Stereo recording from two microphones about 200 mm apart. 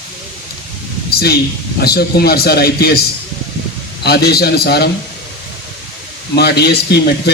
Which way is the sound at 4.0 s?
55° left (ahead or behind).